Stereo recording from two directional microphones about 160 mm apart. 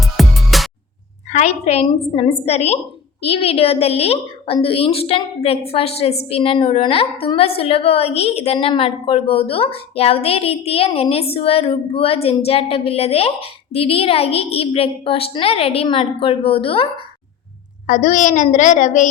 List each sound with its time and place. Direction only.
0.0 s music: centre (ahead or behind)
1.3 s a woman's voice: 45° left (ahead or behind)
17.8 s a woman's voice: 55° left (ahead or behind)